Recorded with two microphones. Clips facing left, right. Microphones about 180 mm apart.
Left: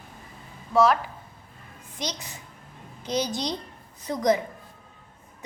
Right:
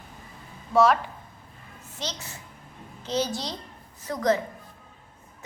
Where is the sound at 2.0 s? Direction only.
15° left (ahead or behind).